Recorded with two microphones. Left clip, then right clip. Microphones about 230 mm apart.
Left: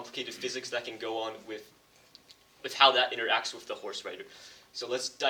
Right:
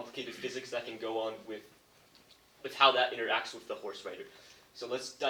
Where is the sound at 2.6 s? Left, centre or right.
Left.